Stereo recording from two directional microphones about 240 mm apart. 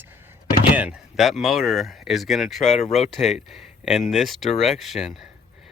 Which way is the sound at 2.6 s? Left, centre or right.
Left.